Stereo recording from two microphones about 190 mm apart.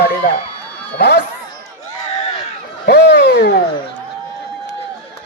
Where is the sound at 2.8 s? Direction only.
60° left (ahead or behind).